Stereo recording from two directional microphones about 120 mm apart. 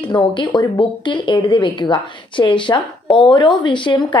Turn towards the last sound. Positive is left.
turn(degrees=40)  # may be behind; listen again after turning